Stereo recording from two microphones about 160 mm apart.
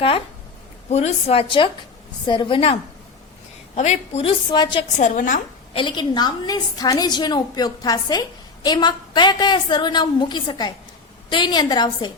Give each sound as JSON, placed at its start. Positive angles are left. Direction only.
{"t": 0.9, "sound": "a woman's voice", "side_deg": 40}
{"t": 3.8, "sound": "a woman's voice", "side_deg": 45}
{"t": 4.9, "sound": "a woman's voice", "side_deg": 50}
{"t": 5.7, "sound": "a woman's voice", "side_deg": 30}